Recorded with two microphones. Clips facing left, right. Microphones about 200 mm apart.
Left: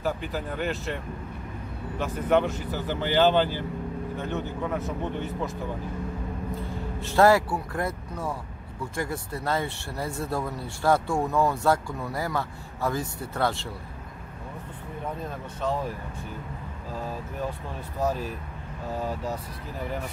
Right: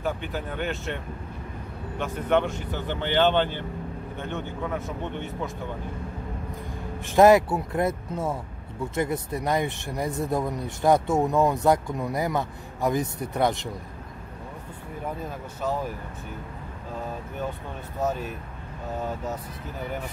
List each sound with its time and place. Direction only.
0.0 s speech: centre (ahead or behind)
2.0 s speech: 5° left (ahead or behind)
6.6 s speech: 15° right (ahead or behind)
15.2 s speech: 5° right (ahead or behind)
18.0 s speech: centre (ahead or behind)